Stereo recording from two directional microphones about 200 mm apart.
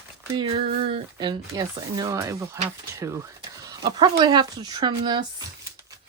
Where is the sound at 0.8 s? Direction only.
25° right (ahead or behind).